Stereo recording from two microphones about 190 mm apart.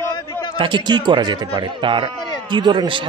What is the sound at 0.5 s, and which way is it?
A man's voice, 25° right (ahead or behind).